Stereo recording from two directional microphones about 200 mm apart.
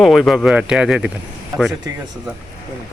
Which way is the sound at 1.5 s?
20° right (ahead or behind).